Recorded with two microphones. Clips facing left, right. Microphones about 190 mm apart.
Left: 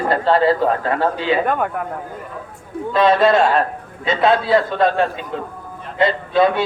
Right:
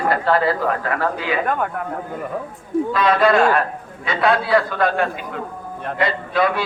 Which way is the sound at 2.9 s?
25° left (ahead or behind).